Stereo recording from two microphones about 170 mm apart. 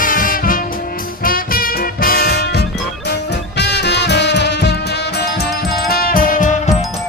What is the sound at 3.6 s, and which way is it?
Music, 80° left.